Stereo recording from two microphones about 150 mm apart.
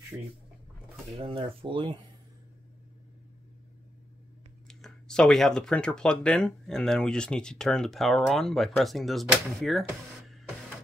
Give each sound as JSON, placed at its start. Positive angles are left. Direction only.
{"t": 1.1, "sound": "speech", "side_deg": -40}
{"t": 4.6, "sound": "speech", "side_deg": 5}